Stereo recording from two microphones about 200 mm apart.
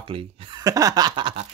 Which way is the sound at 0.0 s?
25° right (ahead or behind).